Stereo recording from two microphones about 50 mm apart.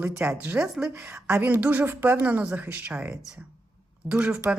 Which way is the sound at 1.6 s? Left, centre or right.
Right.